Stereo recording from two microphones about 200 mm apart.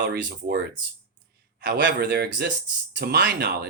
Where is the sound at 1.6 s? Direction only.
55° right (ahead or behind).